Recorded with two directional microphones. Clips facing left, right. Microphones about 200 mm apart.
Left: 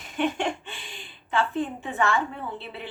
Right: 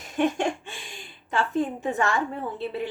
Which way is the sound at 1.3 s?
45° right (ahead or behind).